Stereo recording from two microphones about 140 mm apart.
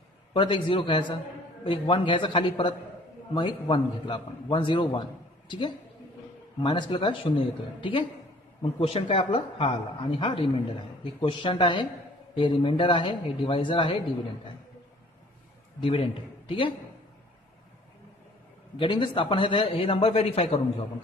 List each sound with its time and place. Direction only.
0.3 s a man's voice: 35° left (ahead or behind)
6.6 s a man's voice: 35° left (ahead or behind)
15.8 s a man's voice: 40° left (ahead or behind)
18.8 s a man's voice: 35° left (ahead or behind)